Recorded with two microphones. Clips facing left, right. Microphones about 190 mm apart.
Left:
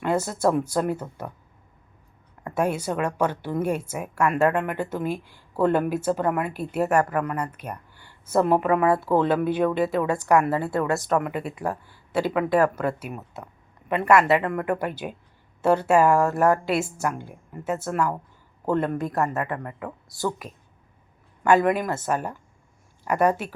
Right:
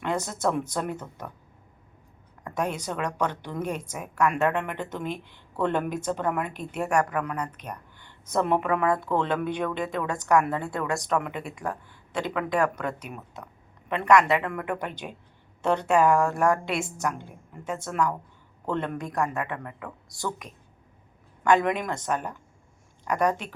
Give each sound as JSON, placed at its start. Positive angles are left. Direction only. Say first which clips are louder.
{"t": 0.0, "sound": "speech", "louder": "left 5 dB", "side_deg": 5}
{"t": 2.4, "sound": "a woman's voice", "louder": "left 5 dB", "side_deg": 10}
{"t": 19.5, "sound": "speech", "louder": "left 4 dB", "side_deg": 40}
{"t": 20.1, "sound": "speech", "louder": "left 6 dB", "side_deg": 0}
{"t": 21.4, "sound": "speech", "louder": "left 3 dB", "side_deg": 5}